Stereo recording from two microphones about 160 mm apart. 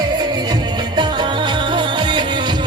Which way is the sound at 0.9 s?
30° right (ahead or behind).